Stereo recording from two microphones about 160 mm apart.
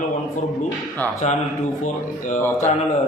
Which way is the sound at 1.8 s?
50° left (ahead or behind).